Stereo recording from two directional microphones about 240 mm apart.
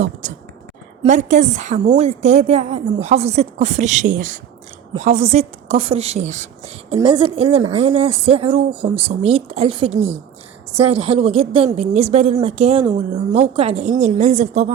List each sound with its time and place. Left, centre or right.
0.0 s a woman's voice: right